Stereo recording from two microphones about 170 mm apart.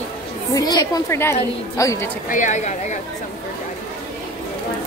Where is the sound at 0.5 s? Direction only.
20° left (ahead or behind).